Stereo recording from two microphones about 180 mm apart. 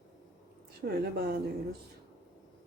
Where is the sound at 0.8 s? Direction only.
65° right (ahead or behind).